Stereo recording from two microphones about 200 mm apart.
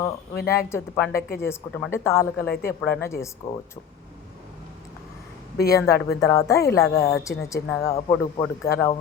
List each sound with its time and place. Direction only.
0.0 s speech: 15° left (ahead or behind)
5.6 s speech: 15° left (ahead or behind)